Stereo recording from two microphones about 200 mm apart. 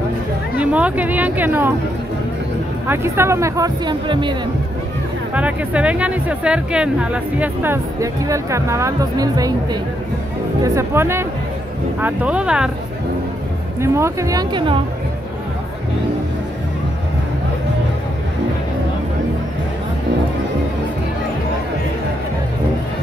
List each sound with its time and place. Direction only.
0.6 s speech: 5° right (ahead or behind)
2.9 s speech: 10° right (ahead or behind)
5.3 s speech: 5° right (ahead or behind)
13.7 s speech: 15° right (ahead or behind)